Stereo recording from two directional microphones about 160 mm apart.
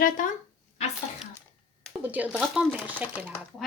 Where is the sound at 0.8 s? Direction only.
40° left (ahead or behind).